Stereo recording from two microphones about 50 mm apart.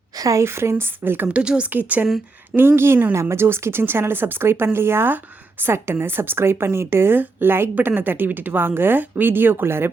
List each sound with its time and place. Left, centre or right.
0.3 s speech: right
1.3 s speech: centre
1.7 s a woman's voice: right
2.6 s speech: right
7.2 s speech: right